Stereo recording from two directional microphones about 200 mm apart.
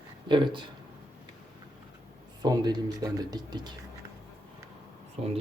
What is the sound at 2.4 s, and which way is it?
Speech, 20° right (ahead or behind).